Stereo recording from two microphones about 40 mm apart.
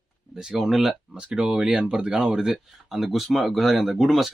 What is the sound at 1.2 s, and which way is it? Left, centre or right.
Speech, right.